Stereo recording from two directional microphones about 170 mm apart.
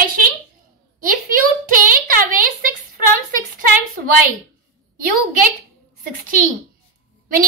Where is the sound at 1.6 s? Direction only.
55° right (ahead or behind).